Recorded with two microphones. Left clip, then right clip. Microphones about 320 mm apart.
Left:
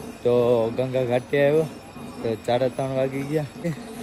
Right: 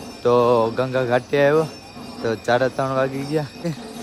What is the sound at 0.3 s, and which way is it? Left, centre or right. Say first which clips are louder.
Mantra: right 3 dB; right.